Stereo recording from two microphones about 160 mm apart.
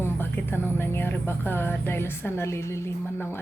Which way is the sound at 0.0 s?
15° left (ahead or behind).